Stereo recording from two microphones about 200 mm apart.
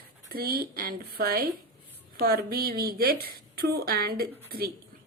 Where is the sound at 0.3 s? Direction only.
50° right (ahead or behind).